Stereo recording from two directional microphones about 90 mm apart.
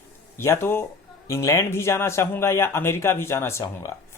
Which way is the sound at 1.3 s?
35° left (ahead or behind).